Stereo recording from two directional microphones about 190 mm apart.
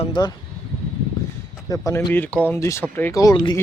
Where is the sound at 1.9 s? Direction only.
10° left (ahead or behind).